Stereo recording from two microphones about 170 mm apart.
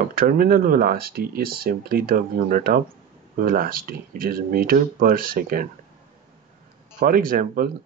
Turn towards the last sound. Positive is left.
turn(degrees=-55)  # may be behind; listen again after turning